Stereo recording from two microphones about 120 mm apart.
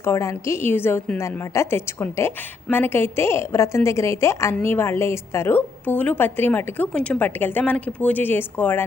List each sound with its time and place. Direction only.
0.0 s a woman's voice: 25° left (ahead or behind)